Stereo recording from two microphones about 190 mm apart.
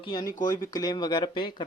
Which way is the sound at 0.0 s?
20° left (ahead or behind).